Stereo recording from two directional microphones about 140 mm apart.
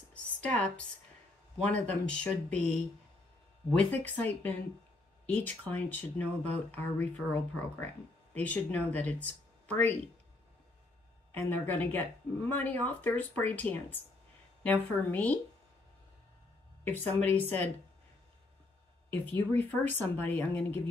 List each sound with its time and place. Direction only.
0.1 s a sound: 10° left (ahead or behind)
1.6 s speech: 10° left (ahead or behind)
3.9 s speech: 10° left (ahead or behind)
11.3 s speech: 15° left (ahead or behind)
16.8 s speech: 10° left (ahead or behind)
19.0 s speech: 15° left (ahead or behind)